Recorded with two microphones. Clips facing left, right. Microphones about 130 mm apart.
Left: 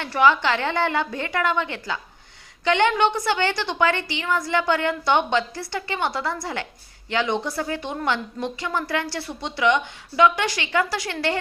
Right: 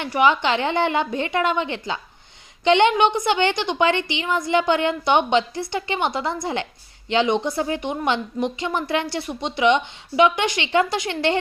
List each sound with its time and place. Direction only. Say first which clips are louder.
0.0 s speech: even; 20° right (ahead or behind)